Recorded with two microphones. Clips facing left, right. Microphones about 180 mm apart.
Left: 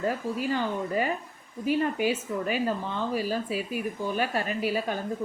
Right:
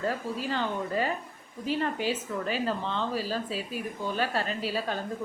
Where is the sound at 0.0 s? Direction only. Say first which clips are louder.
Left 2 dB; 15° left (ahead or behind).